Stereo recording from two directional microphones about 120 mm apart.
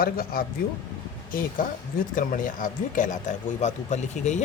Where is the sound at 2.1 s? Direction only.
90° left.